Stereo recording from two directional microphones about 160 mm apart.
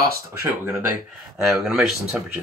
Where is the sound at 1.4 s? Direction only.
Centre (ahead or behind).